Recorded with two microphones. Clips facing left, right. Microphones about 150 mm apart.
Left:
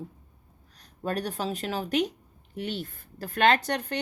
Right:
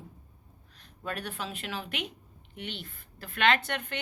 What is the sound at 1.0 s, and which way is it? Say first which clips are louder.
A woman's voice: left 6 dB; 40° left (ahead or behind).